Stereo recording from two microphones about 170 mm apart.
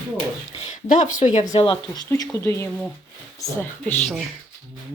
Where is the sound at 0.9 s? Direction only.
45° left (ahead or behind).